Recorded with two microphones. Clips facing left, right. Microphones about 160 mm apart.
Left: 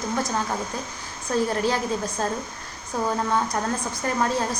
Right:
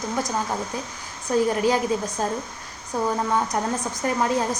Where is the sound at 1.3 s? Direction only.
15° right (ahead or behind).